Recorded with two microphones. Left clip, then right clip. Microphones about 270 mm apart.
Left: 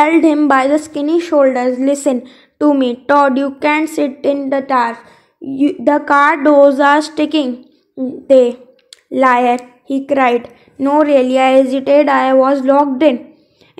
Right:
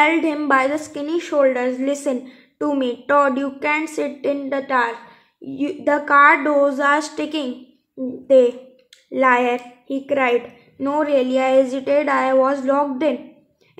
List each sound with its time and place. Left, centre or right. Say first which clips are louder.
0.0 s a woman's voice: left 7 dB; left